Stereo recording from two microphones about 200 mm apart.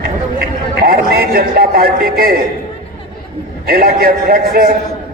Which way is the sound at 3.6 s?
45° right (ahead or behind).